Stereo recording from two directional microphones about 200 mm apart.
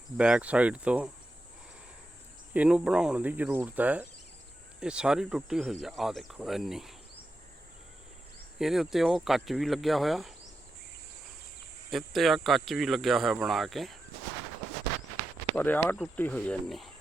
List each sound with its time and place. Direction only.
0.2 s speech: 5° right (ahead or behind)
2.5 s cricket: 5° right (ahead or behind)
4.8 s speech: 5° right (ahead or behind)
8.5 s speech: centre (ahead or behind)
11.9 s speech: centre (ahead or behind)
15.5 s speech: 10° left (ahead or behind)